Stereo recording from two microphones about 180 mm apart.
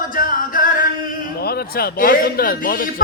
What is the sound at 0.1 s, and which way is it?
Music, 50° left (ahead or behind).